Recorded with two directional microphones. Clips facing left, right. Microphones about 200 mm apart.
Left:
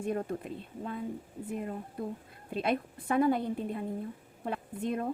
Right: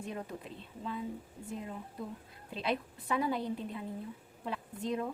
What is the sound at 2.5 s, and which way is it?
A woman's voice, 50° left (ahead or behind).